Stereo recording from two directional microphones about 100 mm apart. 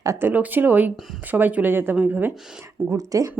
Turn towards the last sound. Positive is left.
turn(degrees=-35)  # may be behind; listen again after turning